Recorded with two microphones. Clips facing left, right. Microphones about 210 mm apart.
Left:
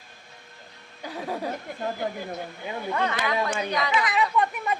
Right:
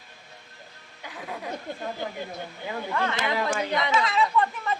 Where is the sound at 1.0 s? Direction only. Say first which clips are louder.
Left 6 dB; 35° left (ahead or behind).